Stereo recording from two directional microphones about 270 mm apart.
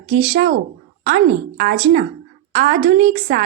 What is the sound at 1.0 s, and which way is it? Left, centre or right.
A woman's voice, right.